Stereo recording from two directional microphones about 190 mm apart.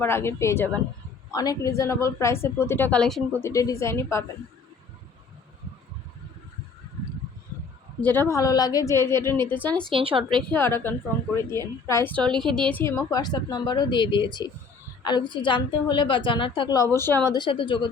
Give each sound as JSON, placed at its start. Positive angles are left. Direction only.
{"t": 0.0, "sound": "a woman's voice", "side_deg": 15}
{"t": 3.4, "sound": "a woman's voice", "side_deg": 15}
{"t": 8.0, "sound": "a woman's voice", "side_deg": 10}
{"t": 9.9, "sound": "a woman's voice", "side_deg": -25}
{"t": 10.5, "sound": "a woman's voice", "side_deg": 10}
{"t": 13.1, "sound": "a woman's voice", "side_deg": 20}
{"t": 17.3, "sound": "a woman's voice", "side_deg": 25}